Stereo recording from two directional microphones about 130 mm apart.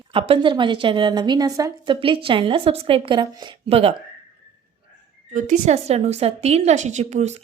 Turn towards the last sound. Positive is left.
turn(degrees=-60)  # may be behind; listen again after turning